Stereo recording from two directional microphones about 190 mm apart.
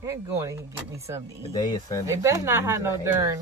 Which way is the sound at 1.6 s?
15° left (ahead or behind).